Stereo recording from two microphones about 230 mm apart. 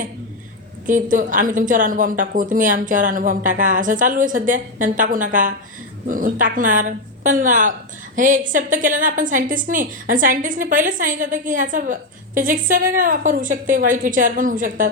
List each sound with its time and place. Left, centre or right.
0.9 s a woman's voice: right